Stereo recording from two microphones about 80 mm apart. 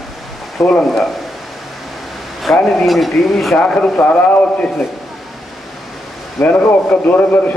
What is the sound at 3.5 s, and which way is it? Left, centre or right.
A man's voice, centre.